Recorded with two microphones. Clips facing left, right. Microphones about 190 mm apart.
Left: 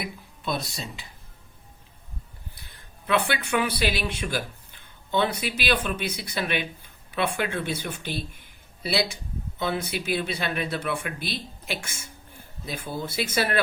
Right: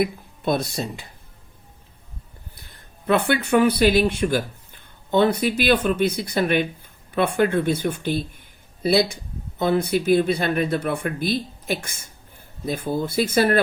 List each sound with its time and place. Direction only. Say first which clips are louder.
0.0 s speech: right 11 dB; 50° right (ahead or behind)
3.1 s speech: right 6 dB; 50° right (ahead or behind)
9.6 s speech: right 8 dB; 50° right (ahead or behind)